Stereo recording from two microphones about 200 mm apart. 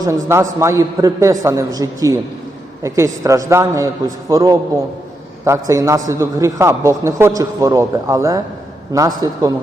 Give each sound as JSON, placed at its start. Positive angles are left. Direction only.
{"t": 0.0, "sound": "a man's voice", "side_deg": -15}